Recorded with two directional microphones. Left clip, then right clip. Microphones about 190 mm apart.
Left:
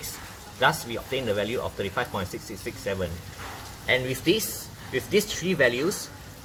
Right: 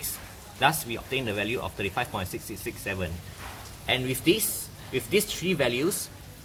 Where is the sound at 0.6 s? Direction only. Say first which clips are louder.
Left 1 dB; 55° right (ahead or behind).